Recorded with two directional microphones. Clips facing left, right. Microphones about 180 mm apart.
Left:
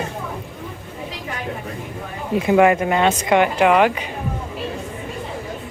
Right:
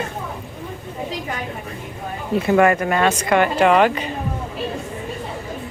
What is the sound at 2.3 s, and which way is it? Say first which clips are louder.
Speech: left 1 dB; 15° left (ahead or behind).